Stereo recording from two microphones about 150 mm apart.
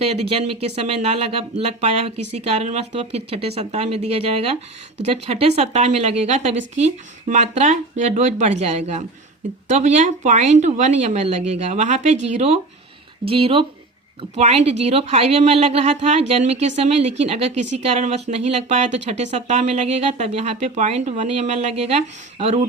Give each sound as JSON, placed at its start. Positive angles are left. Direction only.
{"t": 0.0, "sound": "a woman's voice", "side_deg": -45}